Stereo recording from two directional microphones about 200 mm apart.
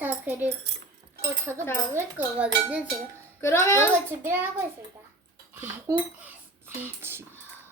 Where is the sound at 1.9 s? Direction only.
5° right (ahead or behind).